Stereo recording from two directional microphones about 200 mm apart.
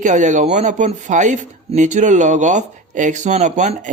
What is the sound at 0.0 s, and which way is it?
Speech, 35° right (ahead or behind).